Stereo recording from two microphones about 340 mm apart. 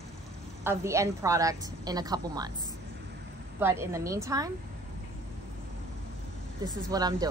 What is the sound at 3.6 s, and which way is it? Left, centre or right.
Speech, centre.